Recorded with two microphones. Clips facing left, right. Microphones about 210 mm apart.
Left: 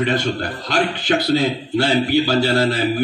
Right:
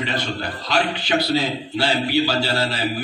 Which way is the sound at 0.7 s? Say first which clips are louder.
Left 2 dB; 50° left (ahead or behind).